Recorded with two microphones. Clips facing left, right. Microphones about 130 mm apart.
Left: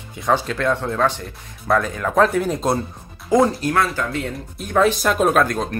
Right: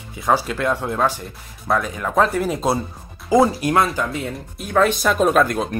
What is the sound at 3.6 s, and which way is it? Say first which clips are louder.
Speech: right 2 dB; 15° right (ahead or behind).